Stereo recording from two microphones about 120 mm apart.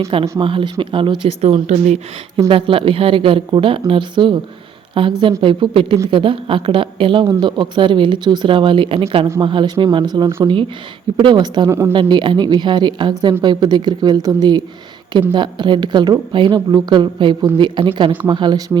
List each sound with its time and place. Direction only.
0.1 s speech: 45° right (ahead or behind)
1.4 s speech: 65° right (ahead or behind)
2.5 s a woman's voice: 50° right (ahead or behind)
11.7 s speech: 25° right (ahead or behind)
11.9 s a woman's voice: 40° right (ahead or behind)